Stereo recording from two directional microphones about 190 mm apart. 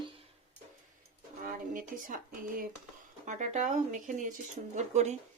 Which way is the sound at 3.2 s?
40° right (ahead or behind).